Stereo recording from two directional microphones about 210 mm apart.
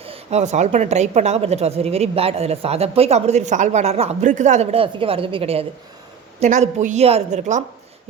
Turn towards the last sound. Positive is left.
turn(degrees=-35)  # may be behind; listen again after turning